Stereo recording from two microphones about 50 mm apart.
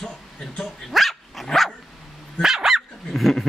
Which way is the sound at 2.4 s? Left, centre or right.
Centre.